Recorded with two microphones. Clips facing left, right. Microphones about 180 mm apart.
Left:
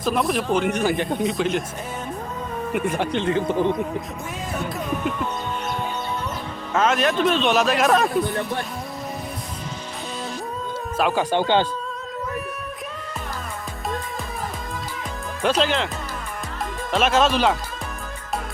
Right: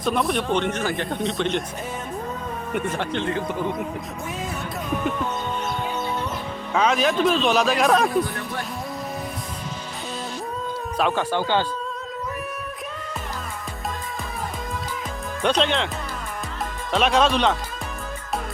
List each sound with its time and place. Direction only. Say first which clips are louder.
0.0 s a man's voice: left 1 dB; centre (ahead or behind)
1.2 s a man's voice: left 2 dB; centre (ahead or behind)
2.9 s speech: left 3 dB; 15° left (ahead or behind)
6.7 s a man's voice: even; centre (ahead or behind)
10.9 s speech: left 1 dB; centre (ahead or behind)
11.2 s speech: left 3 dB; 20° left (ahead or behind)
15.4 s a man's voice: left 1 dB; centre (ahead or behind)
16.9 s a man's voice: even; centre (ahead or behind)